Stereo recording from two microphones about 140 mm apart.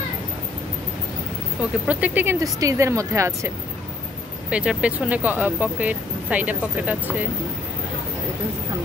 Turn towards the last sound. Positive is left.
turn(degrees=-10)  # may be behind; listen again after turning